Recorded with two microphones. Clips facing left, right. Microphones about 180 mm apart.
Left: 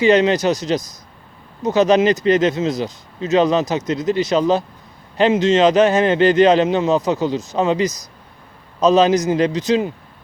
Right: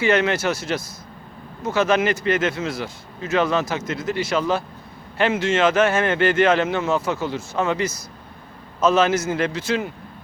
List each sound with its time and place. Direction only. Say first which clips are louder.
0.0 s speech: left 6 dB; 15° left (ahead or behind)